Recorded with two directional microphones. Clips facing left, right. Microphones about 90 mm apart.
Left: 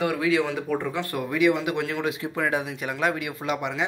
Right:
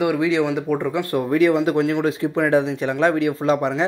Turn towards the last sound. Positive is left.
turn(degrees=-30)  # may be behind; listen again after turning